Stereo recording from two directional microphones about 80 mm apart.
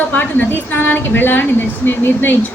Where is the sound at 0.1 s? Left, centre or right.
Left.